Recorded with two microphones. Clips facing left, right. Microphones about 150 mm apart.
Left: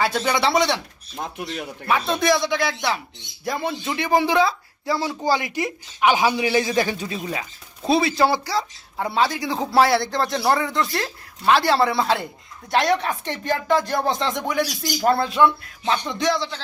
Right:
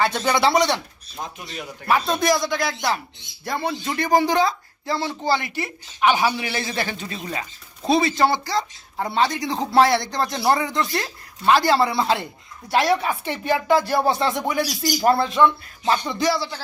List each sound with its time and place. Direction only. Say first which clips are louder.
0.0 s speech: right 1 dB; 5° left (ahead or behind)
2.2 s speech: left 1 dB; centre (ahead or behind)
15.8 s speech: right 2 dB; 5° right (ahead or behind)